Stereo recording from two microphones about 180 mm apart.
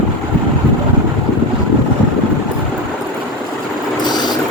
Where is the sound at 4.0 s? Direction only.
25° left (ahead or behind).